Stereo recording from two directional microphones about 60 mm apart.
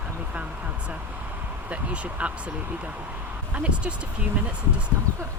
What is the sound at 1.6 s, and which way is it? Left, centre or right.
Speech, right.